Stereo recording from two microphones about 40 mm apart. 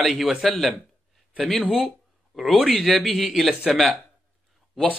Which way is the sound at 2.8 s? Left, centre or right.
Centre.